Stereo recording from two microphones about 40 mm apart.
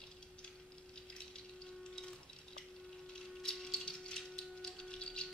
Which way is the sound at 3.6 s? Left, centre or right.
Centre.